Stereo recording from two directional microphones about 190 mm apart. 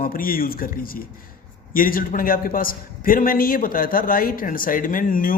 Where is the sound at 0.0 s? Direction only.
50° left (ahead or behind).